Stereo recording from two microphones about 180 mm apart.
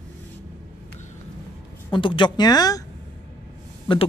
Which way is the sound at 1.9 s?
25° left (ahead or behind).